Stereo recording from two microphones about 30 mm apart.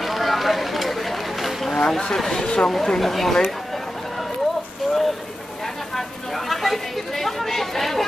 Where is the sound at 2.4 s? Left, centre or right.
Left.